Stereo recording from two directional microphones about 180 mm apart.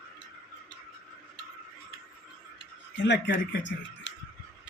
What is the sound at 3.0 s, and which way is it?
Speech, 80° left.